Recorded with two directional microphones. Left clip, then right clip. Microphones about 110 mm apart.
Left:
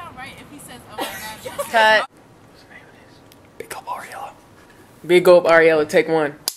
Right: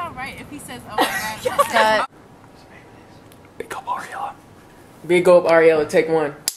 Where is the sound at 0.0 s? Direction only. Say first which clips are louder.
Right 6 dB; centre (ahead or behind).